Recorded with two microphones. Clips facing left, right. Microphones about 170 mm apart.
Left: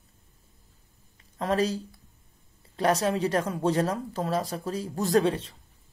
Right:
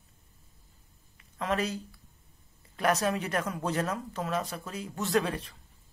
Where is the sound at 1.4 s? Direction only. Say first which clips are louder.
Left 5 dB; 35° left (ahead or behind).